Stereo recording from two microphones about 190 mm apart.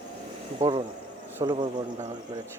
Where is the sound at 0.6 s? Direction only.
25° right (ahead or behind).